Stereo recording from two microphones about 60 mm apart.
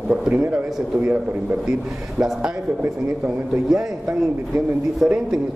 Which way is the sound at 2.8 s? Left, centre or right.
Right.